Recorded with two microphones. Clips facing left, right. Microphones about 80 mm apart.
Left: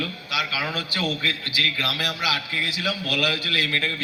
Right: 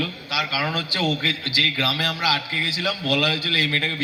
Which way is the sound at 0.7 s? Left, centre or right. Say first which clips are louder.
Right 3 dB; right.